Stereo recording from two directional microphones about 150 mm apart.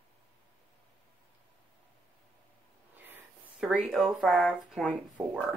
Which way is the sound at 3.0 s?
10° right (ahead or behind).